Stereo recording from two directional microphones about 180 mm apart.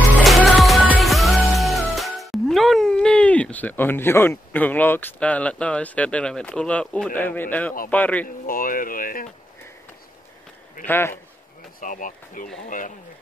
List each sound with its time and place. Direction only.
0.2 s music: centre (ahead or behind)
7.2 s a man's voice: 10° left (ahead or behind)
8.5 s speech: 50° left (ahead or behind)
10.9 s a man's voice: 15° left (ahead or behind)
11.8 s speech: 45° left (ahead or behind)